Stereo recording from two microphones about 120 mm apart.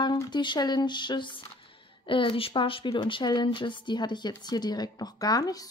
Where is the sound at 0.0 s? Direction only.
40° left (ahead or behind).